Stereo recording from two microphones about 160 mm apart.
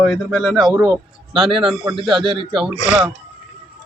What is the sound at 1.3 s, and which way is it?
A man's voice, 30° right (ahead or behind).